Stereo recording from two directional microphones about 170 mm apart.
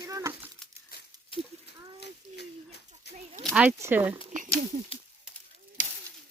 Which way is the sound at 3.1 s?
80° left.